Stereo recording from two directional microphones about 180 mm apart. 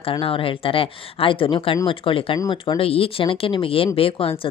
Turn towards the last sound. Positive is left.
turn(degrees=30)  # may be behind; listen again after turning